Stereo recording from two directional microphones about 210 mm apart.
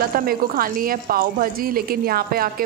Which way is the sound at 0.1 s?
45° right (ahead or behind).